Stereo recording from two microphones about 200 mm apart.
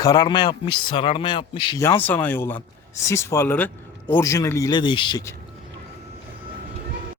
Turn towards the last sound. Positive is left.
turn(degrees=20)  # may be behind; listen again after turning